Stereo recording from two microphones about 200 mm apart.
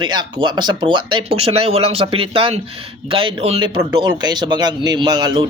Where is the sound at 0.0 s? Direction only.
20° right (ahead or behind).